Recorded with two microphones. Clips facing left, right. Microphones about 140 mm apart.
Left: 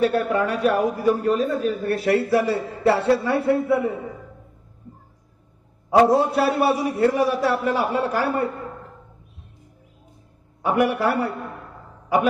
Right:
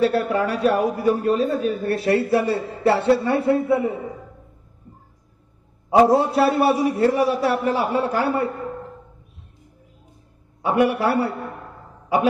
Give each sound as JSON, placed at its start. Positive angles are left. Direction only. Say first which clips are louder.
{"t": 0.2, "sound": "a man's voice", "louder": "even", "side_deg": -30}
{"t": 6.1, "sound": "a man's voice", "louder": "right 1 dB", "side_deg": -25}
{"t": 10.7, "sound": "a man's voice", "louder": "right 1 dB", "side_deg": -25}